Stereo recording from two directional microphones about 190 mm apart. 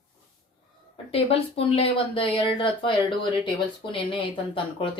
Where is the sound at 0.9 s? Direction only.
30° left (ahead or behind).